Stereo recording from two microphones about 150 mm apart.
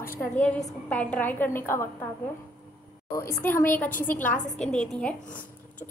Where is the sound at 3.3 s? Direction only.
15° left (ahead or behind).